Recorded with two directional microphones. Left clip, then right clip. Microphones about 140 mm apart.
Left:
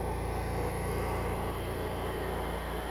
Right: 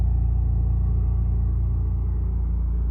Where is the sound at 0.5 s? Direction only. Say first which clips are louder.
Left 5 dB; 30° right (ahead or behind).